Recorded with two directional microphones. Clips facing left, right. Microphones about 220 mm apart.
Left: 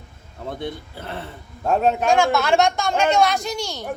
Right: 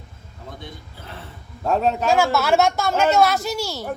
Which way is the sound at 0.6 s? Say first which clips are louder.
Left 9 dB; 65° left (ahead or behind).